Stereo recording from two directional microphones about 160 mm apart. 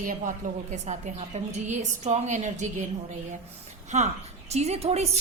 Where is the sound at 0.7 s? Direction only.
45° right (ahead or behind).